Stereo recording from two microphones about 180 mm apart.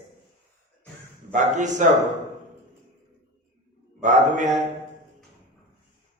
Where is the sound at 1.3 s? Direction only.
45° right (ahead or behind).